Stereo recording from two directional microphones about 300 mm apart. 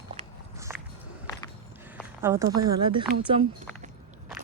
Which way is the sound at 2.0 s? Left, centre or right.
Centre.